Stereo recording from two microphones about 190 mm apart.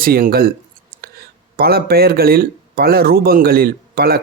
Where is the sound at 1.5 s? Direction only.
55° right (ahead or behind).